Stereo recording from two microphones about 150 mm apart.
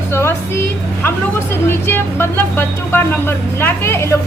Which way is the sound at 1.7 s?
15° left (ahead or behind).